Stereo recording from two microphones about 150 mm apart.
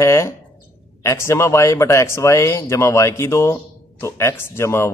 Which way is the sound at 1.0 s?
20° left (ahead or behind).